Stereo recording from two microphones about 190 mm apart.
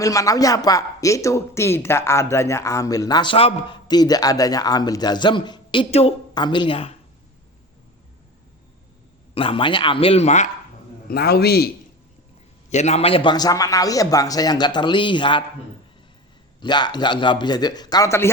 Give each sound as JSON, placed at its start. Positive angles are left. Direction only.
{"t": 0.0, "sound": "speech", "side_deg": 15}
{"t": 9.3, "sound": "speech", "side_deg": 30}
{"t": 11.1, "sound": "a man's voice", "side_deg": 55}
{"t": 12.7, "sound": "speech", "side_deg": 35}
{"t": 16.6, "sound": "speech", "side_deg": 25}